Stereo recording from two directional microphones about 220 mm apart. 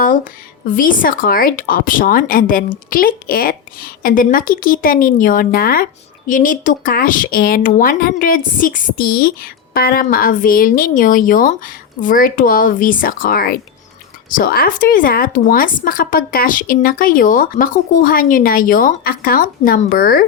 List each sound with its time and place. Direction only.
0.6 s a woman's voice: 40° left (ahead or behind)